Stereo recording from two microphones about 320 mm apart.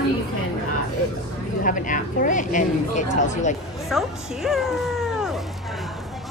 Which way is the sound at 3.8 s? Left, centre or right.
Centre.